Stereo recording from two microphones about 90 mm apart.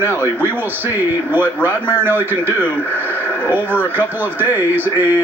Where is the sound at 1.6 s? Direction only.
20° right (ahead or behind).